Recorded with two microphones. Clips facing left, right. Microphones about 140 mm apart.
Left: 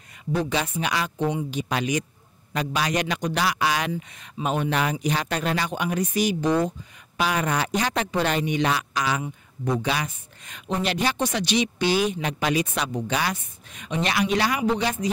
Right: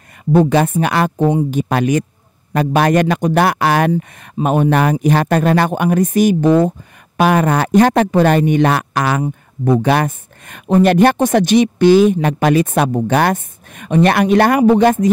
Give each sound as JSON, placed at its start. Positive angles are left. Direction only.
{"t": 0.3, "sound": "speech", "side_deg": -55}